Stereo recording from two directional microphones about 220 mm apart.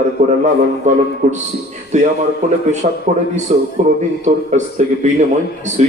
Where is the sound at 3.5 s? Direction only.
35° right (ahead or behind).